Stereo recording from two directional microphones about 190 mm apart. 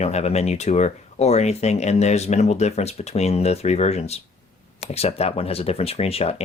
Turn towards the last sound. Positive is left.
turn(degrees=30)  # may be behind; listen again after turning